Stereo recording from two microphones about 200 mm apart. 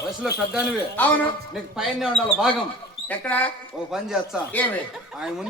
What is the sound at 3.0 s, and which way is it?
Speech, 10° left (ahead or behind).